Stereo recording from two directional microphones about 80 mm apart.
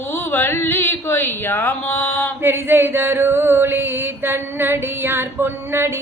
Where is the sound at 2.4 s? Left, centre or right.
Right.